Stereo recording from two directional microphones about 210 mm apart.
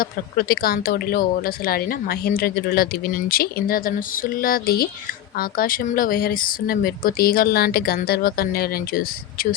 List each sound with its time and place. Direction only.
0.0 s speech: 45° left (ahead or behind)